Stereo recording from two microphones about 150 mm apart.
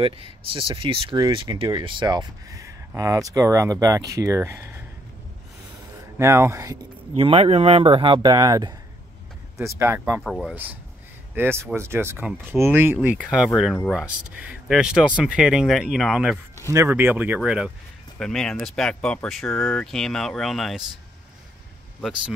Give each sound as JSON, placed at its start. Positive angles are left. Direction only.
{"t": 0.0, "sound": "speech", "side_deg": -35}
{"t": 6.1, "sound": "speech", "side_deg": -15}
{"t": 7.2, "sound": "speech", "side_deg": -40}
{"t": 9.6, "sound": "speech", "side_deg": -15}
{"t": 10.2, "sound": "speech", "side_deg": 0}
{"t": 11.3, "sound": "speech", "side_deg": -15}
{"t": 16.7, "sound": "speech", "side_deg": -15}